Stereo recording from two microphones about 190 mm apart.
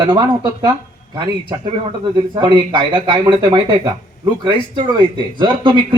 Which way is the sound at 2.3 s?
25° right (ahead or behind).